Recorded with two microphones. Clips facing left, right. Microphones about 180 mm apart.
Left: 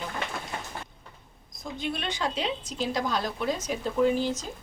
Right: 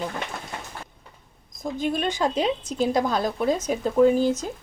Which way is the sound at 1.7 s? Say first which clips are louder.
Right 7 dB; 45° right (ahead or behind).